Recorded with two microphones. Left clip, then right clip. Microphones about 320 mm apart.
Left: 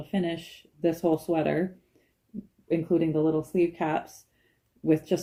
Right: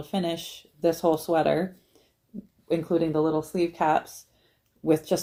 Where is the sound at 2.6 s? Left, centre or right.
Centre.